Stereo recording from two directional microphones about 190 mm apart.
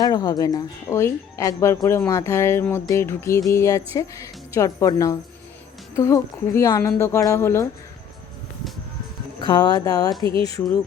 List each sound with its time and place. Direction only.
0.0 s speech: 20° left (ahead or behind)
9.4 s speech: 25° left (ahead or behind)